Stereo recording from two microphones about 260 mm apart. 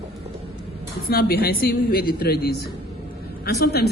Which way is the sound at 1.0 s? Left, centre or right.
Left.